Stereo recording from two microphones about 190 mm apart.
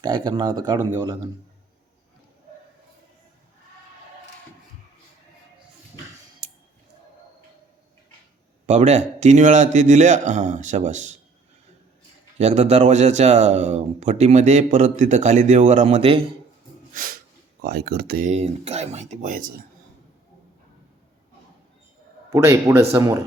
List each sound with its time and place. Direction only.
0.0 s speech: 25° right (ahead or behind)
6.4 s a sound: 30° right (ahead or behind)
8.6 s speech: 35° right (ahead or behind)
12.4 s speech: 35° right (ahead or behind)
16.9 s a sound: 45° right (ahead or behind)
17.6 s speech: 55° right (ahead or behind)
18.3 s speech: 35° right (ahead or behind)
22.3 s a man's voice: 15° right (ahead or behind)